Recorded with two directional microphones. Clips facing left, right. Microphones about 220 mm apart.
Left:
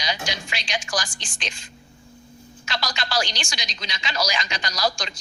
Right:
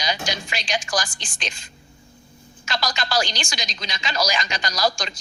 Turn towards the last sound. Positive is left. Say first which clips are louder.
# right 2 dB
turn(degrees=-45)  # may be behind; listen again after turning